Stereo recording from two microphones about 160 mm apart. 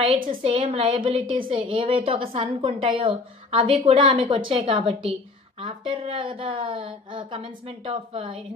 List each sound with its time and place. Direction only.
0.3 s a woman's voice: 35° right (ahead or behind)